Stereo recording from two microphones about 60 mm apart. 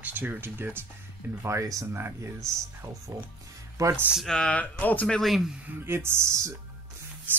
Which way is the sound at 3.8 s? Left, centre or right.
Right.